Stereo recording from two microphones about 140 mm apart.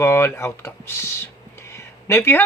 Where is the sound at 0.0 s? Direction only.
20° left (ahead or behind).